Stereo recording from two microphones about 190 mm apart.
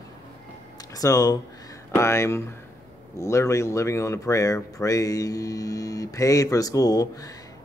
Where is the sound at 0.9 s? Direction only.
20° left (ahead or behind).